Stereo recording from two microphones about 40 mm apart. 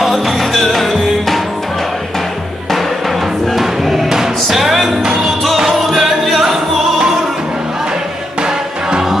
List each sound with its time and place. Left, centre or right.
0.0 s music: centre
2.7 s music: centre
8.4 s music: centre